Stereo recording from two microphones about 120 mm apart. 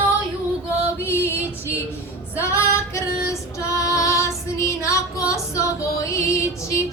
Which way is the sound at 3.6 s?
25° left (ahead or behind).